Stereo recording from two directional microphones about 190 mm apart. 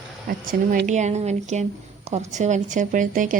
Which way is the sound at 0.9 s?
35° right (ahead or behind).